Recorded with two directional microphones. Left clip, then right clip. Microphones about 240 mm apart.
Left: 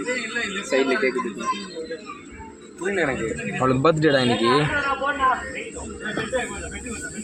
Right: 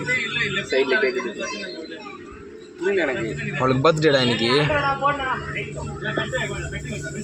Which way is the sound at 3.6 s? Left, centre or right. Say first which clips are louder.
Right 1 dB; centre.